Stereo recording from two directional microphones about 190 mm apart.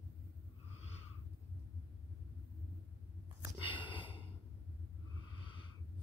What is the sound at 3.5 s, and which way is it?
Sniff, 25° left (ahead or behind).